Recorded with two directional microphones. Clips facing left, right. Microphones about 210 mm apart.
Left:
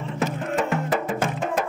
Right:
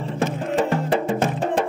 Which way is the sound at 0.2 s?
30° right (ahead or behind).